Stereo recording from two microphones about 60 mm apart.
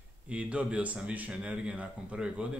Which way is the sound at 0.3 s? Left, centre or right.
Right.